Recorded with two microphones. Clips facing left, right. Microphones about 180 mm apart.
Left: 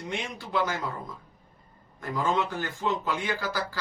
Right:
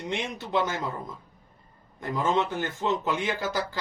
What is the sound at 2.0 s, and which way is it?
Speech, 20° right (ahead or behind).